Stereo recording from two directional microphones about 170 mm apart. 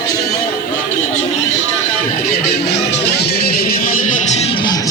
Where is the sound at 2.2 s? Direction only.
75° left (ahead or behind).